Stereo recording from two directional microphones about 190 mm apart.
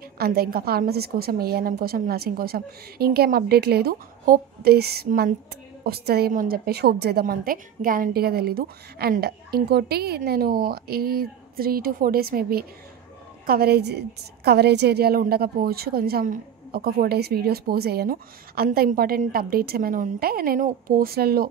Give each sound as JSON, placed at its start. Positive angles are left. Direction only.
{"t": 0.2, "sound": "a woman's voice", "side_deg": -55}